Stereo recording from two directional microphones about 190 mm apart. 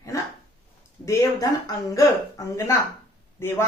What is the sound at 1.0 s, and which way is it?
Speech, 15° left (ahead or behind).